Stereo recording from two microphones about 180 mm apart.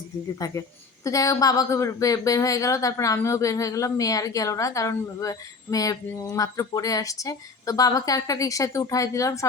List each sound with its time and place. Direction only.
0.3 s speech: 20° left (ahead or behind)